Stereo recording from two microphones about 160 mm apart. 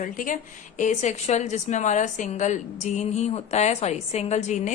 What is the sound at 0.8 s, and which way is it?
A woman's voice, 50° left (ahead or behind).